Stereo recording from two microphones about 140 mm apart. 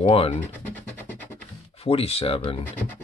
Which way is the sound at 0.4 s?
10° left (ahead or behind).